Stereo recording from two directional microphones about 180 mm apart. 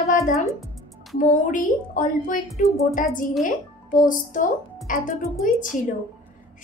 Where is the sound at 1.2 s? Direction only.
45° left (ahead or behind).